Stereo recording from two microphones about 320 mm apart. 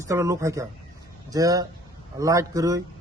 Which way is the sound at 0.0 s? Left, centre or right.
Centre.